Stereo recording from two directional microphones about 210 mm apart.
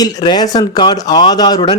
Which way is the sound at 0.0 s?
20° left (ahead or behind).